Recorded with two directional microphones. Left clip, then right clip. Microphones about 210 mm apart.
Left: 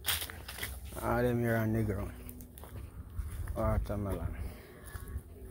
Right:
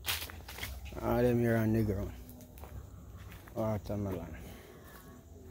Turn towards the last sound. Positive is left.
turn(degrees=-15)  # may be behind; listen again after turning